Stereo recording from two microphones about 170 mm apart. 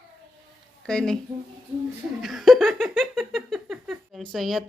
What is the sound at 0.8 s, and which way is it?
Speech, 5° left (ahead or behind).